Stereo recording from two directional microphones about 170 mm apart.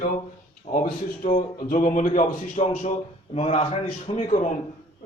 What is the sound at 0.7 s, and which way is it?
A man's voice, 45° left (ahead or behind).